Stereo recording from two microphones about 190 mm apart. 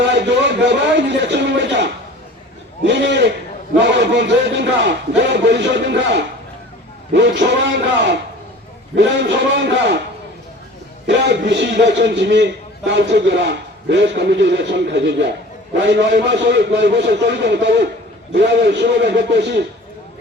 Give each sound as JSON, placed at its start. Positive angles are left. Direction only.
{"t": 0.1, "sound": "a sound", "side_deg": -65}
{"t": 2.8, "sound": "a man's voice", "side_deg": -65}
{"t": 11.0, "sound": "a man's voice", "side_deg": -65}